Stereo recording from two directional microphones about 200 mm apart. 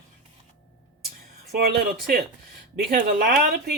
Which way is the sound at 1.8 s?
50° right (ahead or behind).